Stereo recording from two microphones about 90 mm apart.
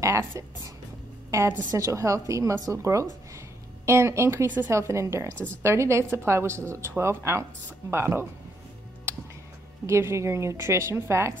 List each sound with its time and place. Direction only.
0.0 s a woman's voice: 35° right (ahead or behind)
1.7 s a woman's voice: 35° right (ahead or behind)
9.8 s a woman's voice: 30° right (ahead or behind)